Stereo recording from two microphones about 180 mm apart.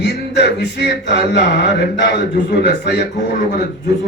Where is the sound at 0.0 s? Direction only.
65° left (ahead or behind).